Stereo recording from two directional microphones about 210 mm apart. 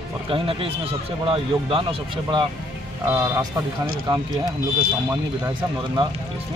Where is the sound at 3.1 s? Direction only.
10° right (ahead or behind).